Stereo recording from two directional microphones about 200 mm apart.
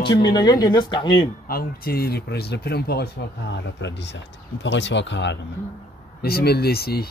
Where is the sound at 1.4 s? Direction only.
50° left (ahead or behind).